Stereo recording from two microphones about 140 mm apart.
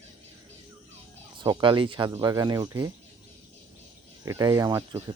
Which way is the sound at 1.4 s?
35° right (ahead or behind).